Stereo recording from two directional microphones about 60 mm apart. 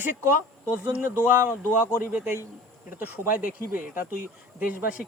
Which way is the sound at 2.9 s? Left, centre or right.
Right.